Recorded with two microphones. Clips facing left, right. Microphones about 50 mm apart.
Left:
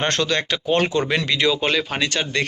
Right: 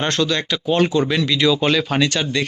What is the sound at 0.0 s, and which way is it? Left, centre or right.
Speech, left.